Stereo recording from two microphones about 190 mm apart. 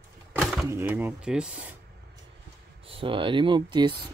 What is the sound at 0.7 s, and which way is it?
Speech, 10° right (ahead or behind).